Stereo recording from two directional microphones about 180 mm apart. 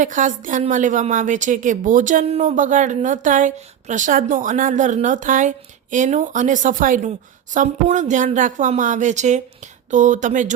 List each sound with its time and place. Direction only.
0.0 s a woman's voice: 45° right (ahead or behind)